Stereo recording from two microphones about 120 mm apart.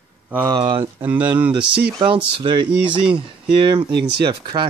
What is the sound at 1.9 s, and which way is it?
Speech, 45° right (ahead or behind).